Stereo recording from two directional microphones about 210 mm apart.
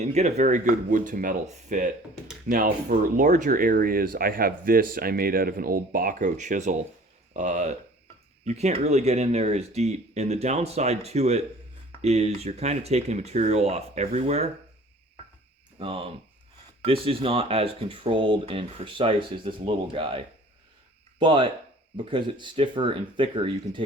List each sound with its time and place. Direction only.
0.0 s speech: 30° right (ahead or behind)
15.8 s speech: 25° right (ahead or behind)